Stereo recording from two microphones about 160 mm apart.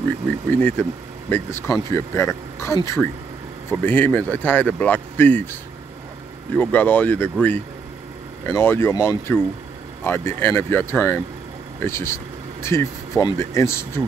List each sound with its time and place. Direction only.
0.5 s speech: 10° left (ahead or behind)